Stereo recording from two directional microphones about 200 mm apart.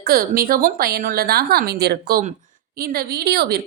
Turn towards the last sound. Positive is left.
turn(degrees=-50)  # may be behind; listen again after turning